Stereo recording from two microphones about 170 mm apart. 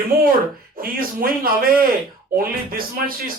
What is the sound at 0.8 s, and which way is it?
Speech, 60° right (ahead or behind).